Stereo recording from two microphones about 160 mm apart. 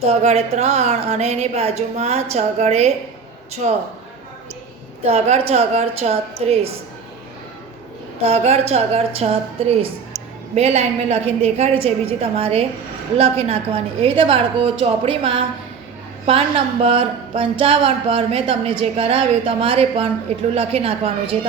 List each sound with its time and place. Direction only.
0.0 s speech: 40° right (ahead or behind)
5.0 s speech: 40° right (ahead or behind)
8.2 s speech: 40° right (ahead or behind)
16.8 s speech: 35° right (ahead or behind)